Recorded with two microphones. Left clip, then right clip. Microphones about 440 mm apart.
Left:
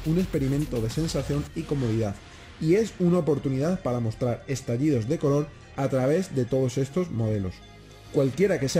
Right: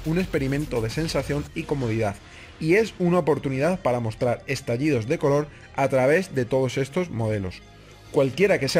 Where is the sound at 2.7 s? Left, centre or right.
Right.